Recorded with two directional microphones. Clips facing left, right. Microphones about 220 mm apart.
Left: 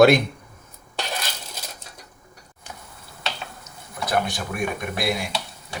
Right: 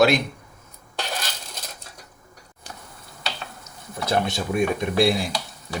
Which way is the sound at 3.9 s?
25° right (ahead or behind).